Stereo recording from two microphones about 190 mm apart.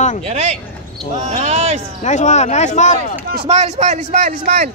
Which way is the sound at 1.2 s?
40° right (ahead or behind).